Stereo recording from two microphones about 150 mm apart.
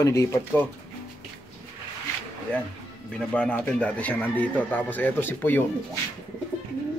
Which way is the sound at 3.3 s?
10° left (ahead or behind).